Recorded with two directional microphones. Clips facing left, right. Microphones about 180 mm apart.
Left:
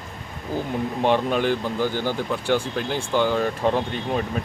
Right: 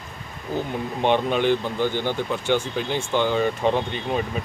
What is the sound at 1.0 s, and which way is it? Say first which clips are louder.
Speech: right 1 dB; centre (ahead or behind).